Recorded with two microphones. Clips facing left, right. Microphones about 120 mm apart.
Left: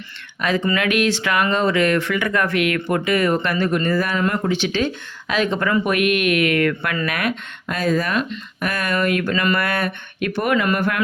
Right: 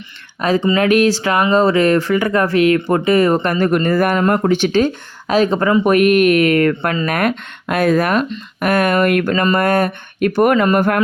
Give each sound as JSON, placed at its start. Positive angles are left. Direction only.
{"t": 0.4, "sound": "speech", "side_deg": -35}
{"t": 9.3, "sound": "speech", "side_deg": -35}